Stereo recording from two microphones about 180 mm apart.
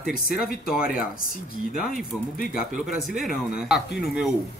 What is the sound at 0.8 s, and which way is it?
Speech, 55° left (ahead or behind).